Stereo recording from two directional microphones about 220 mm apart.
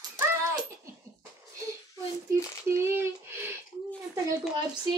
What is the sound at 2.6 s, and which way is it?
Speech, 10° right (ahead or behind).